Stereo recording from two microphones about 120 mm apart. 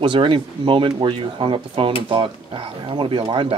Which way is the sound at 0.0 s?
45° right (ahead or behind).